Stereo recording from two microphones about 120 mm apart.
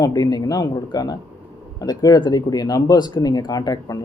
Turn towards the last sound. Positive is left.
turn(degrees=30)  # may be behind; listen again after turning